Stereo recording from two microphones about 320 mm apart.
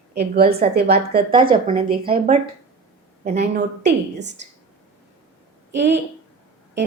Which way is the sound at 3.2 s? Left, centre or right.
Right.